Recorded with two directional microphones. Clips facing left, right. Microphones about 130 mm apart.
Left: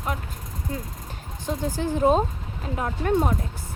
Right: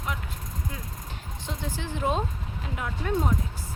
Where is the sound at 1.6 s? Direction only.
40° left (ahead or behind).